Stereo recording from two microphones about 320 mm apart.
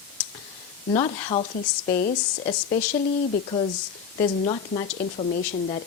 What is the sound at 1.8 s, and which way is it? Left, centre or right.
A woman's voice, left.